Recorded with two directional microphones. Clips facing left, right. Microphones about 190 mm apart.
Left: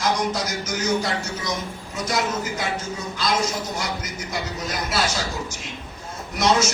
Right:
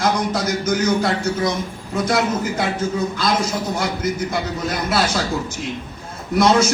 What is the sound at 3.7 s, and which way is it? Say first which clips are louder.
A man's voice: right 7 dB; 55° right (ahead or behind).